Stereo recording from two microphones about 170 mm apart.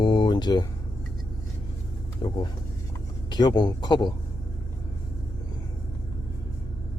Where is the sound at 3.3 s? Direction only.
25° left (ahead or behind).